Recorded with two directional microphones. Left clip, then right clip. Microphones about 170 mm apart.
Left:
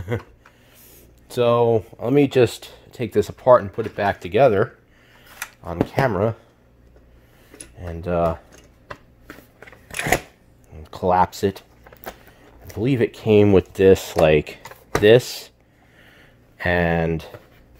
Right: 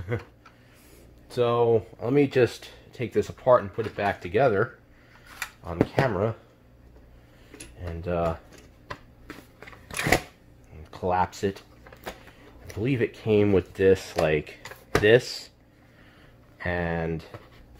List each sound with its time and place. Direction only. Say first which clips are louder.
0.1 s speech: left 4 dB; 55° left (ahead or behind)
1.3 s speech: left 5 dB; 80° left
5.9 s speech: left 7 dB; 75° left (ahead or behind)
7.8 s speech: left 6 dB; 70° left (ahead or behind)
9.3 s crunch: left 2 dB; 10° left (ahead or behind)
10.8 s speech: left 7 dB; 65° left (ahead or behind)
12.7 s speech: left 6 dB; 60° left (ahead or behind)
16.5 s speech: left 9 dB; 70° left (ahead or behind)